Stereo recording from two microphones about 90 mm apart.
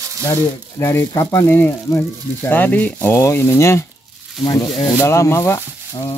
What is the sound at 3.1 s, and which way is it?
Speech, 30° left (ahead or behind).